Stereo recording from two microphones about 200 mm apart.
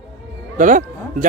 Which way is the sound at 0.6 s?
40° right (ahead or behind).